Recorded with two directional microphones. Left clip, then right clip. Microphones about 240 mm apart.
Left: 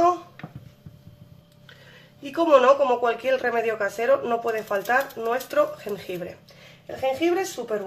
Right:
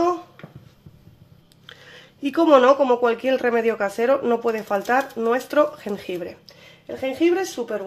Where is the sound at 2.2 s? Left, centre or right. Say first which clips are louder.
Right 2 dB; right.